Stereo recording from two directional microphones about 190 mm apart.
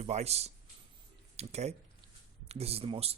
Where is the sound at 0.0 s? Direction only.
35° right (ahead or behind).